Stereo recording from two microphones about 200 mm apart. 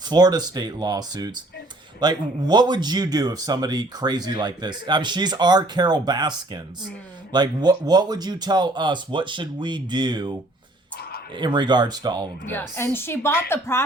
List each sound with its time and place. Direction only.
0.1 s speech: 20° right (ahead or behind)
11.3 s speech: 20° right (ahead or behind)
12.5 s a woman's voice: 10° left (ahead or behind)